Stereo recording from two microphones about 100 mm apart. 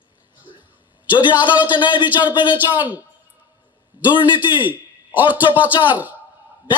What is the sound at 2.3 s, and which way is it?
Speech, 50° left (ahead or behind).